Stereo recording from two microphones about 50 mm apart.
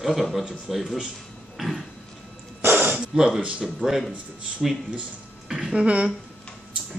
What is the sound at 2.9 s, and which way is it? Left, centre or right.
Gasp, centre.